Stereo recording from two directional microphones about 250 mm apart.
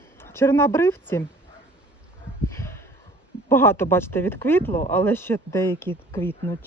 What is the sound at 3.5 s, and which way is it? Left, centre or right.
Speech, centre.